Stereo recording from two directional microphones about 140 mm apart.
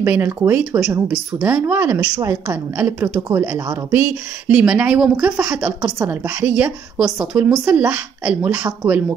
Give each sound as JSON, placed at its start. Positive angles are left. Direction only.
{"t": 0.0, "sound": "a woman's voice", "side_deg": -15}